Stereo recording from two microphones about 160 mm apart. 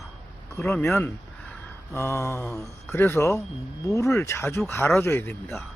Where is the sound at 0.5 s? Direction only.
15° left (ahead or behind).